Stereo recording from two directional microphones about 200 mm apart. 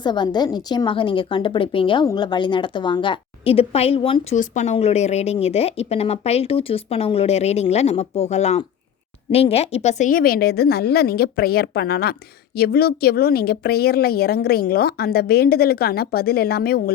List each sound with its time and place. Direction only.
0.0 s a woman's voice: 20° left (ahead or behind); by 16.9 s 50° left (ahead or behind)